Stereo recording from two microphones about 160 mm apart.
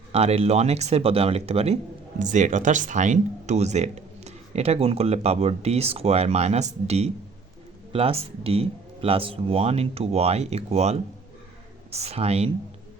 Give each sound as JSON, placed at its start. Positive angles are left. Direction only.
{"t": 0.1, "sound": "speech", "side_deg": -40}